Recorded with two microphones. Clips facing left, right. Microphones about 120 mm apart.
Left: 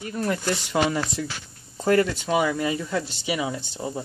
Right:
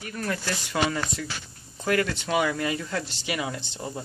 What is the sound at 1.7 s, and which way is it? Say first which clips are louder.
Speech: left 5 dB; 30° left (ahead or behind).